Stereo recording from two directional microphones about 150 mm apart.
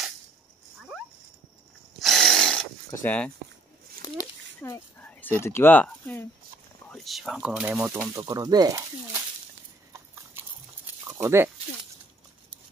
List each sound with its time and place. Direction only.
2.0 s power tool: centre (ahead or behind)
2.9 s speech: 10° left (ahead or behind)
4.6 s speech: 10° left (ahead or behind)
6.9 s speech: centre (ahead or behind); by 8.8 s 25° right (ahead or behind)
11.1 s speech: 15° right (ahead or behind)